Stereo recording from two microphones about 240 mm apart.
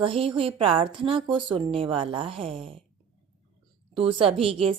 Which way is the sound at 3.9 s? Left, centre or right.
Right.